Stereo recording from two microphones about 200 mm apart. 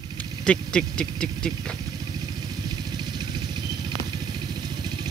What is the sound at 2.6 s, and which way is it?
Vehicle, 20° right (ahead or behind).